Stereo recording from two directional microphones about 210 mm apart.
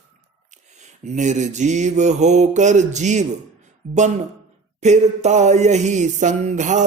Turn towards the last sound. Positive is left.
turn(degrees=-35)  # may be behind; listen again after turning